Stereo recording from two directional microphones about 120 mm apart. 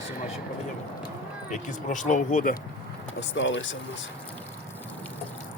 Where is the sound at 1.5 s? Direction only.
90° left.